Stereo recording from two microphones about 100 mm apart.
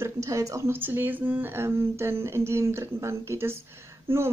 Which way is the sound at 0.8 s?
20° right (ahead or behind).